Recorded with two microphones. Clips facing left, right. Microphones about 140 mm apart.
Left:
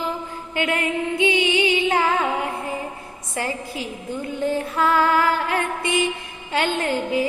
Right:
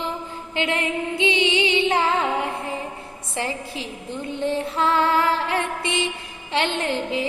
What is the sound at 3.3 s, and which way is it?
Speech, 25° right (ahead or behind).